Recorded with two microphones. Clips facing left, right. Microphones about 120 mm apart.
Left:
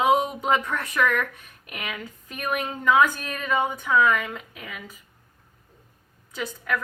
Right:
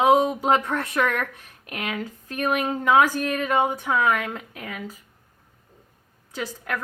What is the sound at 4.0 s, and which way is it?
Speech, 55° right (ahead or behind).